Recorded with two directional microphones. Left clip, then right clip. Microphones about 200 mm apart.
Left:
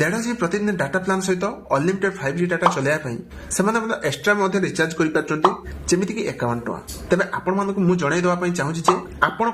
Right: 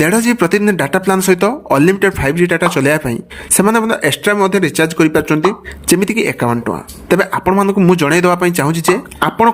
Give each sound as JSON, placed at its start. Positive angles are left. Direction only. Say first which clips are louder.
{"t": 0.0, "sound": "speech", "louder": "right 9 dB", "side_deg": -50}